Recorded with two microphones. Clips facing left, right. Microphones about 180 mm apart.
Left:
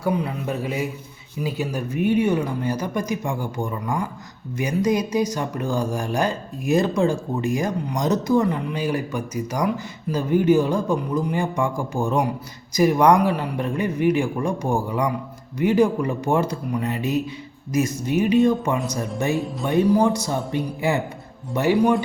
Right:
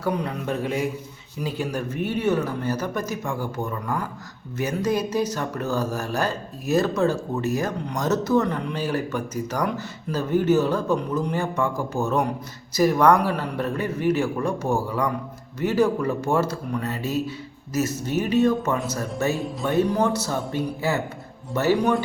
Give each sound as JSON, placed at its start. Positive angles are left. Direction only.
{"t": 0.0, "sound": "a man's voice", "side_deg": 5}